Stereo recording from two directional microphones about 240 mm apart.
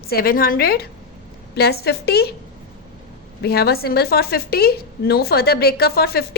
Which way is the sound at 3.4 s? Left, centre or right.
Left.